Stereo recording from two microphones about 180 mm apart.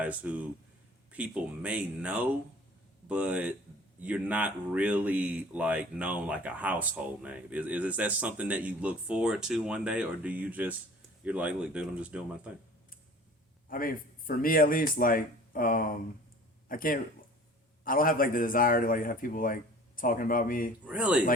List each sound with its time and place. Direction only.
0.0 s speech: 10° right (ahead or behind)
13.7 s speech: 50° left (ahead or behind)
20.8 s speech: 5° right (ahead or behind)